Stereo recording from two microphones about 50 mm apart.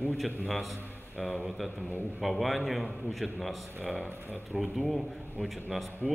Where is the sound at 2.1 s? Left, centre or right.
Centre.